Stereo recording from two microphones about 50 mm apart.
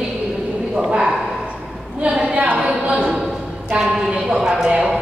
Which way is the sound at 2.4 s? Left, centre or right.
Right.